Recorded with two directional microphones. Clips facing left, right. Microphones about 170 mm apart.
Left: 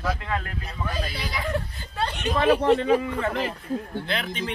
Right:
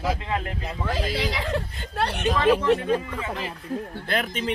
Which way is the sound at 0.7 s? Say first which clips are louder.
Right 5 dB; 90° right.